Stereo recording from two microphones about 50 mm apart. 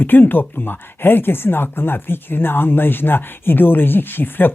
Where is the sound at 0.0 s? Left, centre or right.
Left.